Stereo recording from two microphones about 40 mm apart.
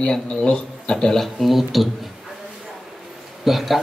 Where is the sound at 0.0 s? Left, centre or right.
Centre.